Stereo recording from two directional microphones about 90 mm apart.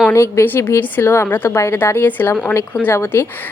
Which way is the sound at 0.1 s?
30° left (ahead or behind).